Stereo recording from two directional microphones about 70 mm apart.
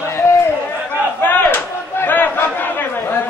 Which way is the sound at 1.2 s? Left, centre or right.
Left.